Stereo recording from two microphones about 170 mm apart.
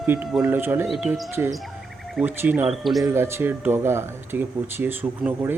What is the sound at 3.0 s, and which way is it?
Speech, 15° right (ahead or behind).